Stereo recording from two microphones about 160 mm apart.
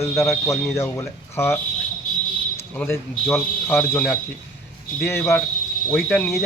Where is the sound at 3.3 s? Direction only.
15° left (ahead or behind).